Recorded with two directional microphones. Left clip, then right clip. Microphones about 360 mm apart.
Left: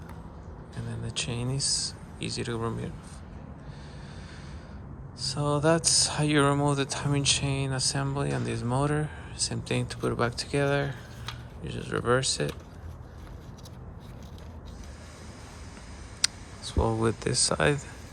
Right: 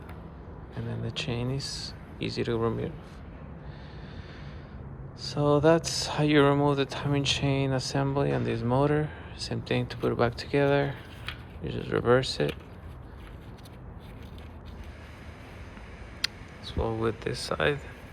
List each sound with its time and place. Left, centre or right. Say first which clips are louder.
0.9 s speech: even; centre
5.3 s speech: right 3 dB; centre
16.2 s speech: left 3 dB; centre